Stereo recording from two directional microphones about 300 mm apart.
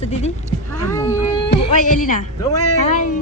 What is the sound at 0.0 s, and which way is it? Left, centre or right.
Speech, left.